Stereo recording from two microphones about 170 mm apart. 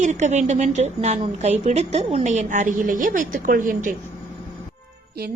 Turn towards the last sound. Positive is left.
turn(degrees=-55)  # may be behind; listen again after turning